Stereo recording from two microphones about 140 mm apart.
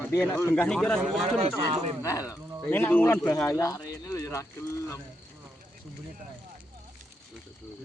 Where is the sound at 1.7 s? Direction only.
40° right (ahead or behind).